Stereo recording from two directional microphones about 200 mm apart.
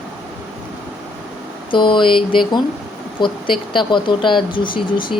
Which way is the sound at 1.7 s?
25° left (ahead or behind).